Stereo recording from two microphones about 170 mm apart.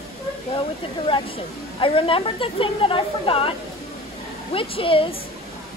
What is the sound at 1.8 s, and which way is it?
A woman's voice, 30° left (ahead or behind).